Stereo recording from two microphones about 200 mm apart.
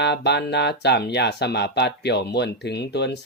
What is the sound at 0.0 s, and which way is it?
Speech, 55° left (ahead or behind).